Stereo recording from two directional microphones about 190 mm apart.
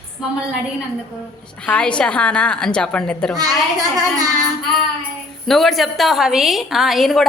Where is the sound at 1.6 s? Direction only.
5° left (ahead or behind).